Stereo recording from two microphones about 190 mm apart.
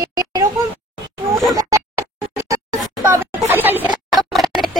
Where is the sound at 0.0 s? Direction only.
20° right (ahead or behind).